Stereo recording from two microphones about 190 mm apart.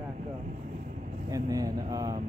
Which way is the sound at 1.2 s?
20° right (ahead or behind).